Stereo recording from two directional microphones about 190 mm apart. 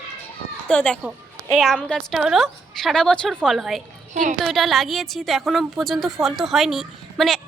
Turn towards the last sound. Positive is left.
turn(degrees=0)  # may be behind; listen again after turning